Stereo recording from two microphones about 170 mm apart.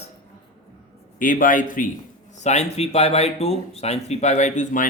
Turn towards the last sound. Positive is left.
turn(degrees=50)  # may be behind; listen again after turning